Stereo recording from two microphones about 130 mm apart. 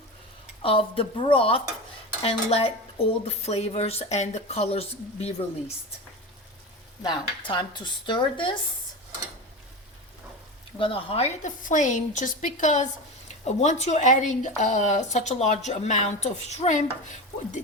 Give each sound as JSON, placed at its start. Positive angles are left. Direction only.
{"t": 0.6, "sound": "speech", "side_deg": 45}
{"t": 7.0, "sound": "speech", "side_deg": 35}
{"t": 10.8, "sound": "speech", "side_deg": 45}
{"t": 11.4, "sound": "a woman's voice", "side_deg": 75}
{"t": 13.4, "sound": "a woman's voice", "side_deg": 60}